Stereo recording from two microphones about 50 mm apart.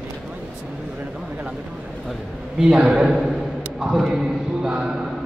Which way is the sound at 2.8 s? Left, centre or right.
Centre.